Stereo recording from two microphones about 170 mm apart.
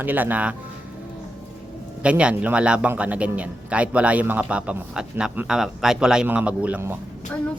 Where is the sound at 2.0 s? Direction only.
5° right (ahead or behind).